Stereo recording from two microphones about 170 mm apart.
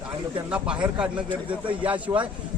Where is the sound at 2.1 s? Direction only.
25° right (ahead or behind).